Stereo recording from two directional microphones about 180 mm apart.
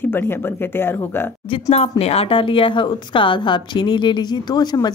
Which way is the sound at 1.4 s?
30° left (ahead or behind).